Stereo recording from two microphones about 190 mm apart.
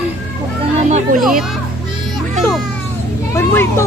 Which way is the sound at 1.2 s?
Centre (ahead or behind).